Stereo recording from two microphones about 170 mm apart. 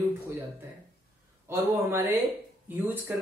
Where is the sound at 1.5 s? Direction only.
15° right (ahead or behind).